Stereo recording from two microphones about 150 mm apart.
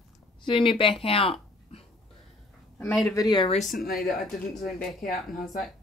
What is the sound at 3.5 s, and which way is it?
Speech, 50° left (ahead or behind).